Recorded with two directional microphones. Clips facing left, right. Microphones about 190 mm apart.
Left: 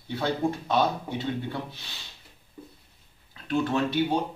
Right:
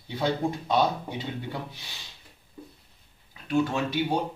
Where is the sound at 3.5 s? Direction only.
10° right (ahead or behind).